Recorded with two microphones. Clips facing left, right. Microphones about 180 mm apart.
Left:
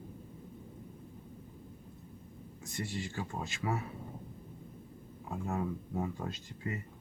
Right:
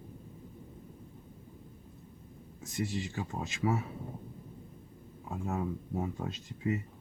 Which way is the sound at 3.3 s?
20° right (ahead or behind).